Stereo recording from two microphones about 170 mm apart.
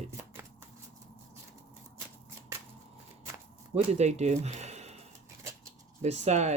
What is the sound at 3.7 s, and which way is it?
Speech, 40° right (ahead or behind).